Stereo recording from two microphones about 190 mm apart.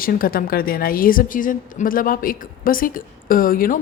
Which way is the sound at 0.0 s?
50° left (ahead or behind).